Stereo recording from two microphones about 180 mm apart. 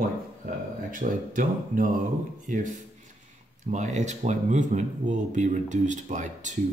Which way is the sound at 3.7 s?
40° right (ahead or behind).